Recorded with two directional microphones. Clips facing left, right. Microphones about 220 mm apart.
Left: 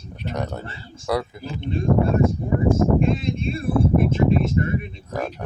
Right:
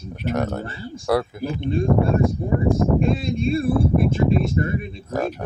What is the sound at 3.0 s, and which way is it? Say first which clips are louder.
Speech: right 2 dB; 35° right (ahead or behind).